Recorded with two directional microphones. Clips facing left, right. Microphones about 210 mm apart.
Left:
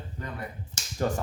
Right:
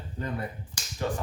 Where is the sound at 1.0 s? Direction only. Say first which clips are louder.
Left 2 dB; 40° left (ahead or behind).